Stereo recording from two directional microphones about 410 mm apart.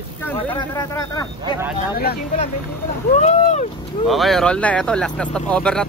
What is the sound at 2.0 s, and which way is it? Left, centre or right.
Speech, left.